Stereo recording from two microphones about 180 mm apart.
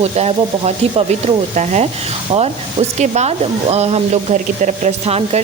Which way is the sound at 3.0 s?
40° right (ahead or behind).